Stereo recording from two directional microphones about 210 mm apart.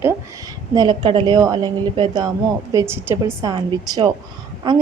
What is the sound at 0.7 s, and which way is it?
A woman's voice, 20° right (ahead or behind).